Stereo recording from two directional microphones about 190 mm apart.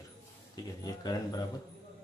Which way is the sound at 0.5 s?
20° left (ahead or behind).